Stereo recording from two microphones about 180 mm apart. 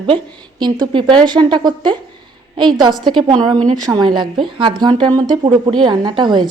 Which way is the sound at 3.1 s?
25° right (ahead or behind).